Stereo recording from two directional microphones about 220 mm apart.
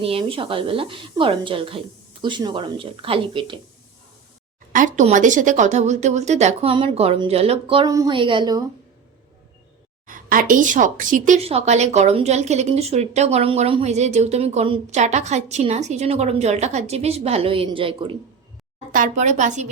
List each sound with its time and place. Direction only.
0.0 s a woman's voice: 25° right (ahead or behind)
4.7 s a woman's voice: 35° right (ahead or behind); by 8.6 s 20° right (ahead or behind)
10.1 s a woman's voice: 40° right (ahead or behind)
18.9 s speech: 35° right (ahead or behind)